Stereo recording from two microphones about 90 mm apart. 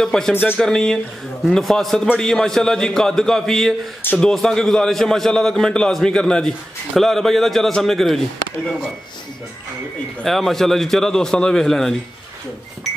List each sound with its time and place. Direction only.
0.0 s a man's voice: 5° left (ahead or behind)
0.3 s speech: 20° left (ahead or behind)
0.6 s a man's voice: 5° left (ahead or behind)
10.2 s a man's voice: 5° left (ahead or behind)